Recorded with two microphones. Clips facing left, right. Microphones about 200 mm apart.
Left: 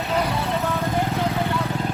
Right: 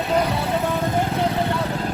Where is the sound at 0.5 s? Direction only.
15° right (ahead or behind).